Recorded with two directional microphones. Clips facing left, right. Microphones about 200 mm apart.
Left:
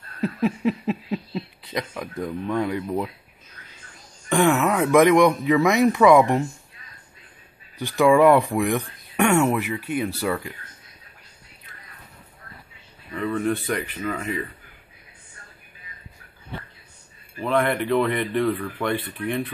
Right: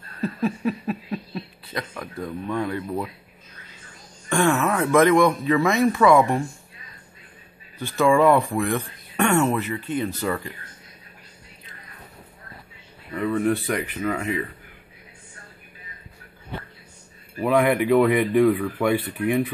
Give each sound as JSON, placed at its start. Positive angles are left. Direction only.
{"t": 0.2, "sound": "a sound", "side_deg": 20}
{"t": 2.5, "sound": "speech", "side_deg": 15}
{"t": 4.3, "sound": "speech", "side_deg": 15}
{"t": 7.8, "sound": "speech", "side_deg": 15}
{"t": 13.1, "sound": "speech", "side_deg": -10}
{"t": 17.4, "sound": "speech", "side_deg": -10}